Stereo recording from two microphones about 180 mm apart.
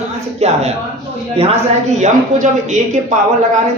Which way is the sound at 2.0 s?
40° right (ahead or behind).